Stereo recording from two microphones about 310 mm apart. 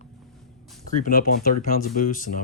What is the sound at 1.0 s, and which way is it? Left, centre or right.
Speech, left.